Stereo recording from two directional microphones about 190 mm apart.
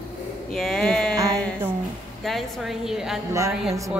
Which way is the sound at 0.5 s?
Centre (ahead or behind).